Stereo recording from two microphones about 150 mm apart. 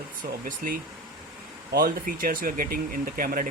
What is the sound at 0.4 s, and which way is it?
Speech, 65° right (ahead or behind).